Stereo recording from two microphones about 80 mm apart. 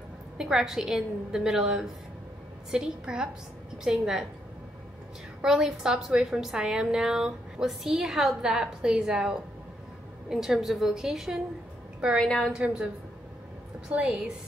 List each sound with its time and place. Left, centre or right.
0.4 s a woman's voice: centre
5.4 s a woman's voice: centre
12.2 s a woman's voice: centre
12.5 s a woman's voice: centre
13.9 s a woman's voice: centre